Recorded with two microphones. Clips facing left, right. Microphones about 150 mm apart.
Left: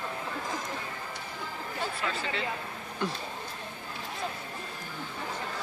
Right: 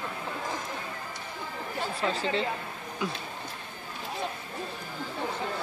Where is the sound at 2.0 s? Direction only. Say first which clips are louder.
Right 5 dB; 30° right (ahead or behind).